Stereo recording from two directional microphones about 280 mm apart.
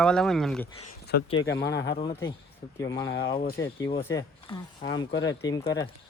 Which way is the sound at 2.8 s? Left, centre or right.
Centre.